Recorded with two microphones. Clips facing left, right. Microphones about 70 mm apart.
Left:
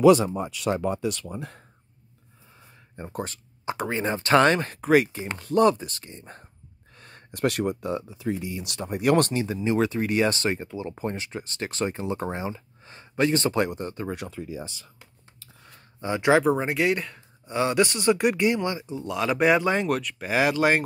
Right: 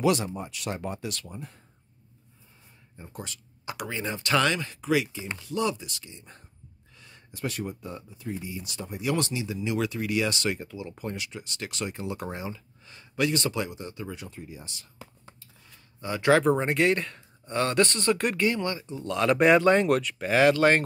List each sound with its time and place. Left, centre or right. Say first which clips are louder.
3.0 s speech: left 8 dB; left
3.3 s speech: left 7 dB; left
13.6 s speech: left 6 dB; left
16.0 s speech: left 1 dB; left
16.4 s speech: even; centre